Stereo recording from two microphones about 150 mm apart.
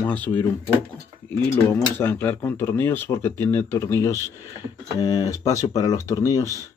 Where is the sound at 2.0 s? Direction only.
15° left (ahead or behind).